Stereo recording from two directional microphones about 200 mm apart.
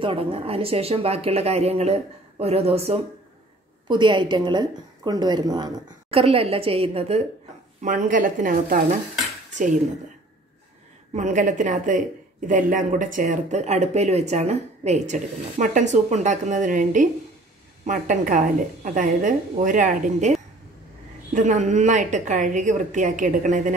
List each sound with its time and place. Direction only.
0.0 s a woman's voice: 30° right (ahead or behind)
7.8 s speech: 40° right (ahead or behind)
11.1 s speech: 40° right (ahead or behind)